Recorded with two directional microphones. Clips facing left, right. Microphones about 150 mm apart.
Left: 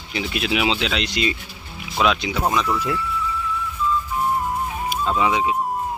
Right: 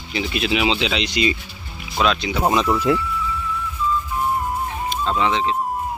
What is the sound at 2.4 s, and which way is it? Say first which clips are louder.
Speech: right 5 dB; 20° right (ahead or behind).